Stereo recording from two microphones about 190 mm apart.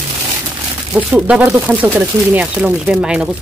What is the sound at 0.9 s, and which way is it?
Speech, 5° right (ahead or behind).